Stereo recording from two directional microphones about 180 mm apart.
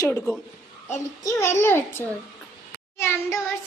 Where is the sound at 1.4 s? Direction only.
15° left (ahead or behind).